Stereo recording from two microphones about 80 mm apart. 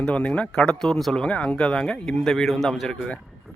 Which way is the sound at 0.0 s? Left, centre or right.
Centre.